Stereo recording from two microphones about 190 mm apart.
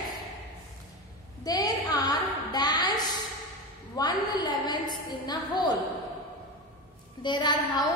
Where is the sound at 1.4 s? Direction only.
20° left (ahead or behind).